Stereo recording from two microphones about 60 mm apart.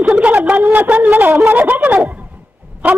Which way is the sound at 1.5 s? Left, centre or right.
Right.